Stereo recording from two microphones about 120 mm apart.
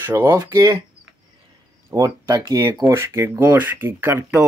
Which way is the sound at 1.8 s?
30° right (ahead or behind).